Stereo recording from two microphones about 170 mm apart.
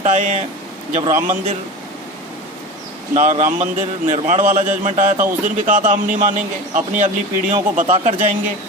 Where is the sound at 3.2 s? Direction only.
45° right (ahead or behind).